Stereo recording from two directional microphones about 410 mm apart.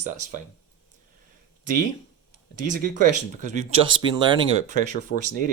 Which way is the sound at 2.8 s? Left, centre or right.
Centre.